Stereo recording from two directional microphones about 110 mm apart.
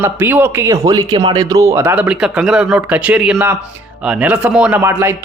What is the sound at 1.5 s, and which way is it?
Speech, 25° right (ahead or behind).